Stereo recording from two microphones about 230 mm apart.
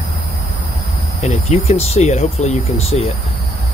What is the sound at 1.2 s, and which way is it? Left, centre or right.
Speech, left.